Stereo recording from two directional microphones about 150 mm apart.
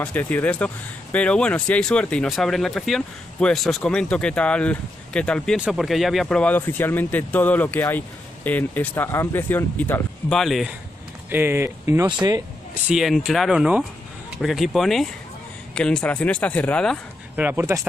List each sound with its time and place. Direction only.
0.0 s speech: 10° left (ahead or behind)
10.3 s speech: centre (ahead or behind)
11.2 s speech: 15° right (ahead or behind)
12.1 s speech: 25° right (ahead or behind)
12.8 s speech: centre (ahead or behind)
17.4 s speech: 15° right (ahead or behind)